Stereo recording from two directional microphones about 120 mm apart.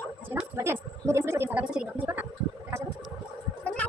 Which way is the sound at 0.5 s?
20° right (ahead or behind).